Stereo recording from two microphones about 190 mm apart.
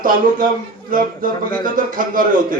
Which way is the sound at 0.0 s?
45° right (ahead or behind).